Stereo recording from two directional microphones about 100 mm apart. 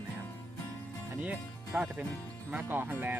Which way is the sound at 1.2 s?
15° right (ahead or behind).